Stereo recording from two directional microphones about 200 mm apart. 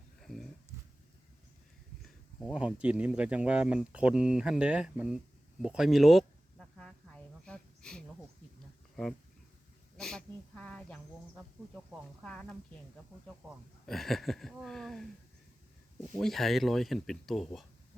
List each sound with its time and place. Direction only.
0.2 s a sound: centre (ahead or behind)
2.0 s speech: centre (ahead or behind)
5.6 s a sound: 5° right (ahead or behind)
10.0 s speech: 5° left (ahead or behind)
13.8 s speech: centre (ahead or behind)
16.1 s speech: centre (ahead or behind)